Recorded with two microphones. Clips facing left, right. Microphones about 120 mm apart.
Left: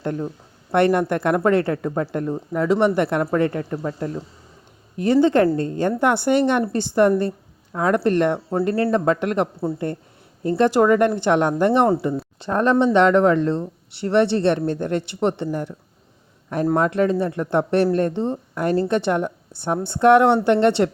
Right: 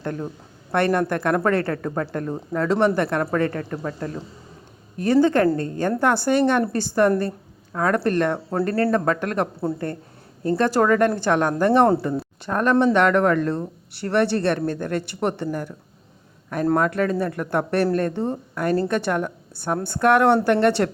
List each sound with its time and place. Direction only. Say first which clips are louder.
0.7 s a woman's voice: left 3 dB; 20° left (ahead or behind)
16.7 s a woman's voice: left 3 dB; 25° left (ahead or behind)